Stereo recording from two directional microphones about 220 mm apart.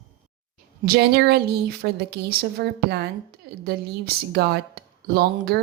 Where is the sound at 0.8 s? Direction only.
45° right (ahead or behind).